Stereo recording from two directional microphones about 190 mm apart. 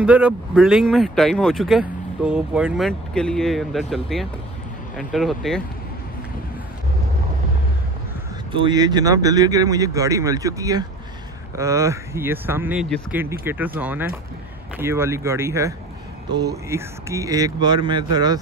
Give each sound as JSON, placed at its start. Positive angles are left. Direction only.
{"t": 0.0, "sound": "speech", "side_deg": -5}
{"t": 8.5, "sound": "speech", "side_deg": -25}